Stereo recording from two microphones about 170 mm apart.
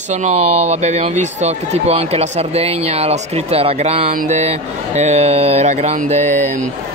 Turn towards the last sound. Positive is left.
turn(degrees=-40)  # may be behind; listen again after turning